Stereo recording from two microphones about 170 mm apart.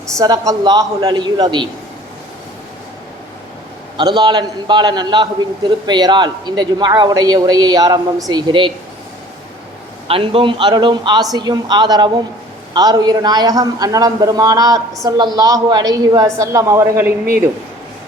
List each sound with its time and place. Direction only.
0.2 s a man's voice: 20° right (ahead or behind)
3.9 s a man's voice: 25° right (ahead or behind)
10.1 s a man's voice: 30° right (ahead or behind); by 17.1 s 15° right (ahead or behind)